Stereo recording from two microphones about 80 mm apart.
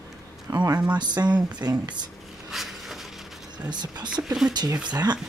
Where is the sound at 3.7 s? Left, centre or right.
Right.